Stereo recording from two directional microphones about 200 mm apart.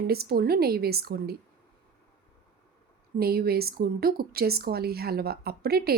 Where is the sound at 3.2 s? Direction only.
50° right (ahead or behind).